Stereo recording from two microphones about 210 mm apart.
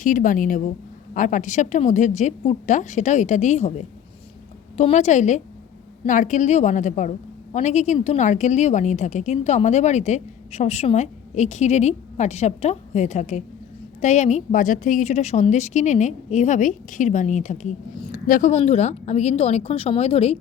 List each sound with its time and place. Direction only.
0.0 s a woman's voice: 40° left (ahead or behind)